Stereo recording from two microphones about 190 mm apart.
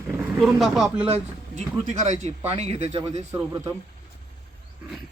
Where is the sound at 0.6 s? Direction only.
Centre (ahead or behind).